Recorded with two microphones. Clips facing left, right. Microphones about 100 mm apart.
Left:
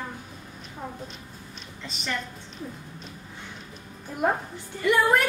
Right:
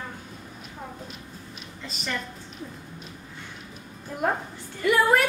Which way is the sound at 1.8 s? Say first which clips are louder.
Even; centre (ahead or behind).